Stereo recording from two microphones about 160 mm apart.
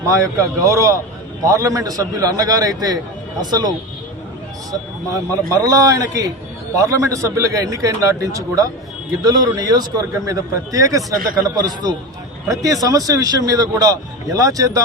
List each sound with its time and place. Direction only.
0.1 s a man's voice: 20° right (ahead or behind)